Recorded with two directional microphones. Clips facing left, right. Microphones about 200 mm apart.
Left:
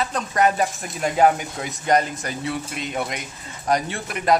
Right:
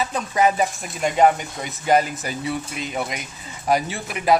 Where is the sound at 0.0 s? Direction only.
5° right (ahead or behind).